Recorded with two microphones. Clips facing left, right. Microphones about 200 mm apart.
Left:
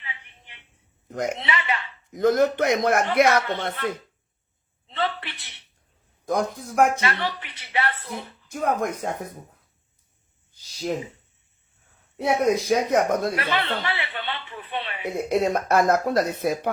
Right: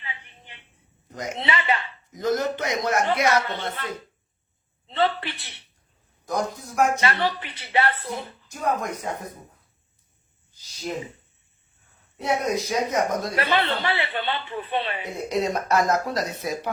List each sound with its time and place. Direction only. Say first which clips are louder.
0.0 s a sound: right 2 dB; 35° right (ahead or behind)
1.0 s a sound: left 7 dB; 55° left (ahead or behind)
1.4 s speech: right 2 dB; 30° right (ahead or behind)
2.1 s speech: left 5 dB; 60° left (ahead or behind)
4.9 s a sound: right 4 dB; 35° right (ahead or behind)
6.2 s speech: left 2 dB; 55° left (ahead or behind)
7.0 s speech: right 3 dB; 35° right (ahead or behind)
8.4 s speech: left 2 dB; 55° left (ahead or behind)
12.1 s speech: left 4 dB; 60° left (ahead or behind)
13.3 s a woman's voice: right 2 dB; 30° right (ahead or behind)
15.3 s speech: left 2 dB; 55° left (ahead or behind)